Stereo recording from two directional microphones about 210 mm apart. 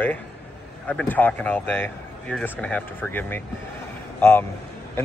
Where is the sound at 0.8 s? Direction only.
5° left (ahead or behind).